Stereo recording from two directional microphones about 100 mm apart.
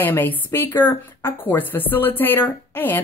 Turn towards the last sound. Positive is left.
turn(degrees=20)  # may be behind; listen again after turning